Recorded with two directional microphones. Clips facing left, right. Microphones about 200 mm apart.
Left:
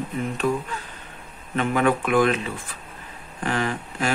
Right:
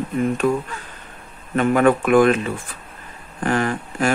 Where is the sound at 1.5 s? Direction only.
50° right (ahead or behind).